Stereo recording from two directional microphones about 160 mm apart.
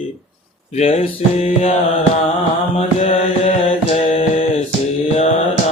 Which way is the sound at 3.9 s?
35° left (ahead or behind).